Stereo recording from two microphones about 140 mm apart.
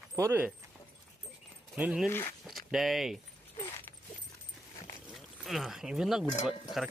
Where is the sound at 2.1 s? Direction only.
15° left (ahead or behind).